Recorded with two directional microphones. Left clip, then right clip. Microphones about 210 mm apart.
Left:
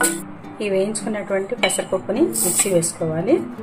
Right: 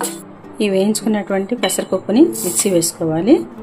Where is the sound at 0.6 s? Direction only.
50° right (ahead or behind).